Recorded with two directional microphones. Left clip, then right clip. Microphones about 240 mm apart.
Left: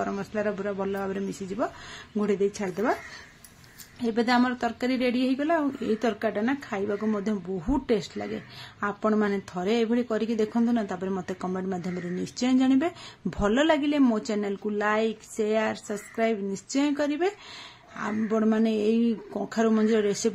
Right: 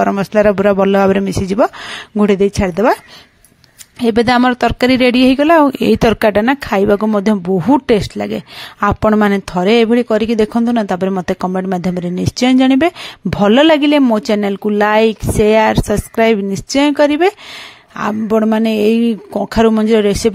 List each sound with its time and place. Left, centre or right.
0.0 s speech: right
4.0 s speech: right